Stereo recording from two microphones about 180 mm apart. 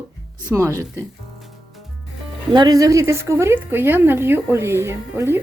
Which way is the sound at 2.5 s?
20° right (ahead or behind).